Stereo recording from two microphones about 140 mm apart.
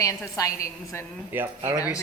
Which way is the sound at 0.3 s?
25° left (ahead or behind).